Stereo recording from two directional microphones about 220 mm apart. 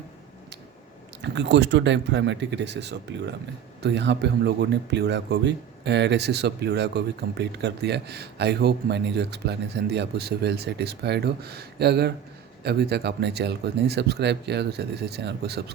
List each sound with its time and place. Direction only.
1.2 s speech: 50° right (ahead or behind)